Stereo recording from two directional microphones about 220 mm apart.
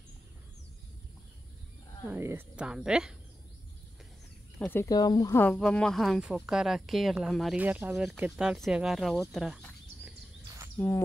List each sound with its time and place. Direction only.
2.0 s speech: 10° right (ahead or behind)
4.6 s speech: 10° left (ahead or behind)